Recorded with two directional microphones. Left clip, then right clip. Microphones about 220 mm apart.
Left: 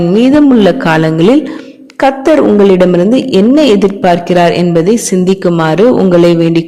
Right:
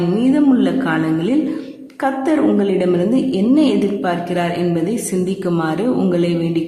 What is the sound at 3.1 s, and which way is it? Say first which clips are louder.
A woman's voice: left 8 dB; 40° left (ahead or behind).